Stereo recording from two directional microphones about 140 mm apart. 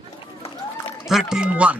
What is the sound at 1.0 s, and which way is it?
Speech, 5° right (ahead or behind).